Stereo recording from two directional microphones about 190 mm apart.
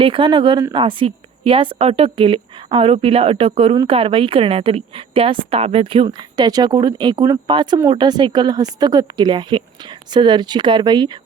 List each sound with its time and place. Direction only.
0.0 s a woman's voice: 25° right (ahead or behind)